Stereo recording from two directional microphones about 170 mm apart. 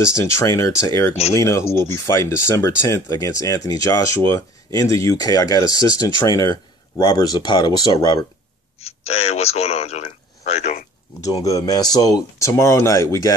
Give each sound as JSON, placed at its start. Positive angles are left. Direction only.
{"t": 0.0, "sound": "speech", "side_deg": 15}
{"t": 8.7, "sound": "speech", "side_deg": 35}
{"t": 11.2, "sound": "speech", "side_deg": 20}